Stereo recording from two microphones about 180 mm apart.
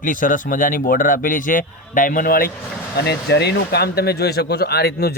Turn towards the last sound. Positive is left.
turn(degrees=60)  # may be behind; listen again after turning